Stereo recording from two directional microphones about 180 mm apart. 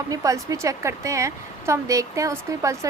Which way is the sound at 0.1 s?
20° right (ahead or behind).